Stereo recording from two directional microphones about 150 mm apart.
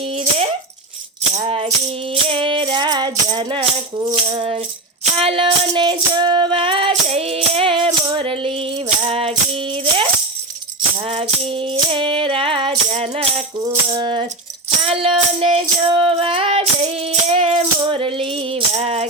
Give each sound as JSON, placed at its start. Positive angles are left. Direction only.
{"t": 0.2, "sound": "a sound", "side_deg": -45}
{"t": 1.4, "sound": "music", "side_deg": -40}
{"t": 13.6, "sound": "music", "side_deg": -30}